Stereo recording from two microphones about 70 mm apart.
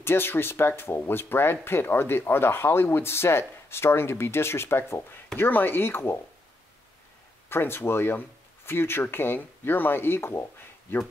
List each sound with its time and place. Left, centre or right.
0.0 s speech: left
7.4 s speech: left